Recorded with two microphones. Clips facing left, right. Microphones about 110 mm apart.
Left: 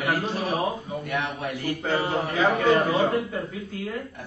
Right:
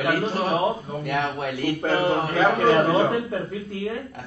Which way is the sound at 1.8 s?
55° right (ahead or behind).